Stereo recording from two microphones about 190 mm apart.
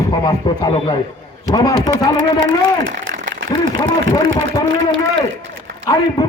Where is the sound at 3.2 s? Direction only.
75° right (ahead or behind).